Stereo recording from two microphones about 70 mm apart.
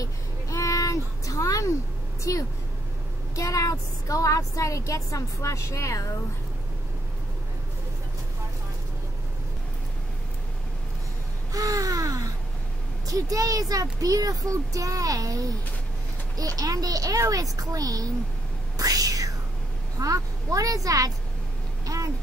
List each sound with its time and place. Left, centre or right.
0.0 s a sound: left
2.3 s a woman's voice: left
11.5 s babbling: right
13.0 s speech: right
18.8 s whispering: right
20.0 s speech: right
21.8 s a sound: right